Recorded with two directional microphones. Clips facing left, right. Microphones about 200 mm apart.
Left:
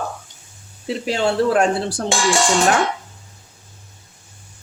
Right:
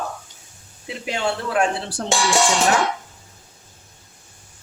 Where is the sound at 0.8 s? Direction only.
35° left (ahead or behind).